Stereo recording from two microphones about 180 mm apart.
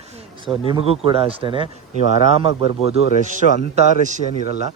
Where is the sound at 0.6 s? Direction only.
30° right (ahead or behind).